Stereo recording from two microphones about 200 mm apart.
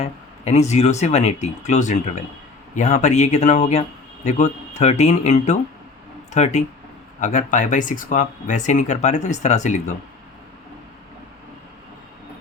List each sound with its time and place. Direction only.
0.0 s a man's voice: 35° left (ahead or behind)